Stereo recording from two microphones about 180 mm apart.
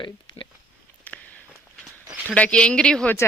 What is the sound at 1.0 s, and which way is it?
Walk, 10° left (ahead or behind).